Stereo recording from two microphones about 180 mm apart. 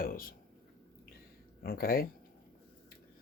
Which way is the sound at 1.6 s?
55° left (ahead or behind).